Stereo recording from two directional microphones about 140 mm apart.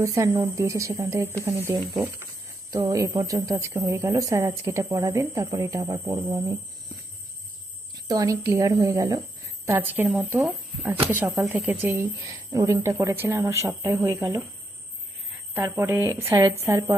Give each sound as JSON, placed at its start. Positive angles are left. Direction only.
{"t": 0.0, "sound": "speech", "side_deg": -20}
{"t": 8.0, "sound": "a woman's voice", "side_deg": -25}
{"t": 15.5, "sound": "a woman's voice", "side_deg": -15}